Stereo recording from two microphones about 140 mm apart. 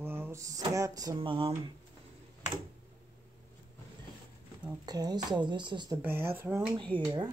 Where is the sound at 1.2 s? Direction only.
40° right (ahead or behind).